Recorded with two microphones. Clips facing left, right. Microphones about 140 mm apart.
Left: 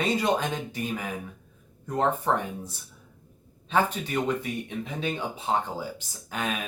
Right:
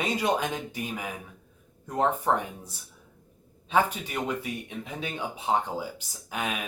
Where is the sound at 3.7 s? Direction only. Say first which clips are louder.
Even; 10° right (ahead or behind).